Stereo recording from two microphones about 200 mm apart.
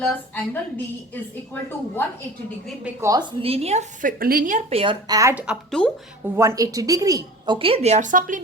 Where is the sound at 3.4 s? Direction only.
30° right (ahead or behind); by 5.5 s 10° right (ahead or behind).